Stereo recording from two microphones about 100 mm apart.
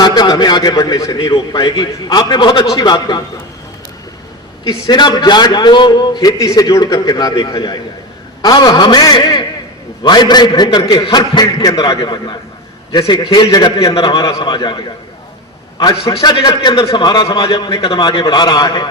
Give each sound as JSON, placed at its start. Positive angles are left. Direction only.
{"t": 0.0, "sound": "a man's voice", "side_deg": 45}
{"t": 1.2, "sound": "a man's voice", "side_deg": 50}
{"t": 4.9, "sound": "a man's voice", "side_deg": 45}
{"t": 14.4, "sound": "a man's voice", "side_deg": 50}
{"t": 15.8, "sound": "a man's voice", "side_deg": 40}